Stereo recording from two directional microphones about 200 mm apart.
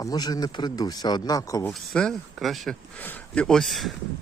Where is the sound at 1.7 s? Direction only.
Centre (ahead or behind).